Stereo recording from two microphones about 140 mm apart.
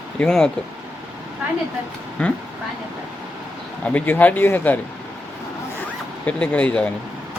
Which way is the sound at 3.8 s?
10° left (ahead or behind).